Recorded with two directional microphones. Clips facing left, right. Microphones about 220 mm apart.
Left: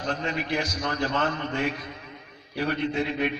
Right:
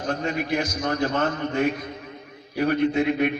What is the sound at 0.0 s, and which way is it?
A man's voice, 45° right (ahead or behind).